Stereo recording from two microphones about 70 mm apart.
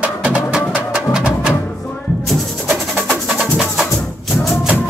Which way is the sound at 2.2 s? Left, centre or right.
Centre.